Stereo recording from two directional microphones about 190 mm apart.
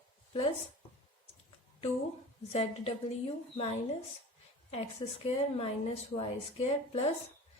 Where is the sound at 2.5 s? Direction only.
30° left (ahead or behind).